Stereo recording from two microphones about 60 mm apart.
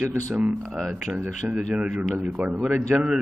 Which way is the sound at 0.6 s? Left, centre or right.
Centre.